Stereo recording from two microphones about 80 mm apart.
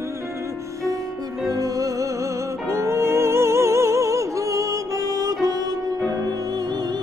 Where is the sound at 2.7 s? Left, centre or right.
Right.